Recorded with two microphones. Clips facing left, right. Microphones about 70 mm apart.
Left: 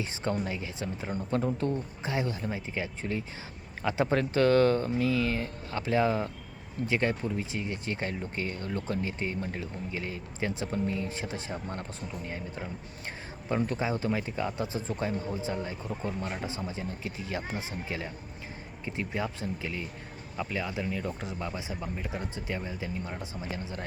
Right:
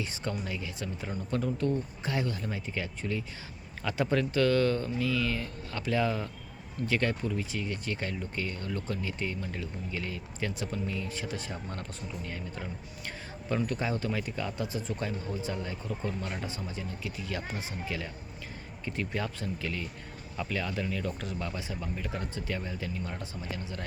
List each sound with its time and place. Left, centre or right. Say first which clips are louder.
0.4 s speech: left 2 dB; left